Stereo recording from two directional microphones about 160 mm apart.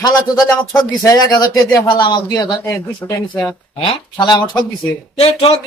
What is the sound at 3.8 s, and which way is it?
Speech, 25° left (ahead or behind).